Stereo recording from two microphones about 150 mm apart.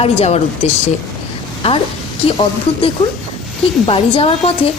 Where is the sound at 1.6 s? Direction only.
40° left (ahead or behind).